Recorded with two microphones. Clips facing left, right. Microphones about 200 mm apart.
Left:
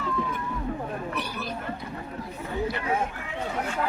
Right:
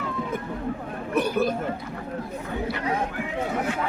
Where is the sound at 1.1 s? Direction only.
50° right (ahead or behind).